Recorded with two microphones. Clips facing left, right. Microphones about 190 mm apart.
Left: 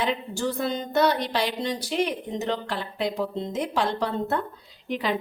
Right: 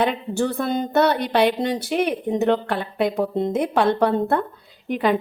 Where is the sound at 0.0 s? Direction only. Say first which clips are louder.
Right 5 dB; 60° right (ahead or behind).